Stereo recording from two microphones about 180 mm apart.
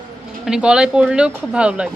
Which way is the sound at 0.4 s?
5° right (ahead or behind).